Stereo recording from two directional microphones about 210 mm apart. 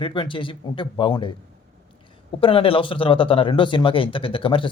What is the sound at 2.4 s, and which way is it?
Speech, 25° left (ahead or behind).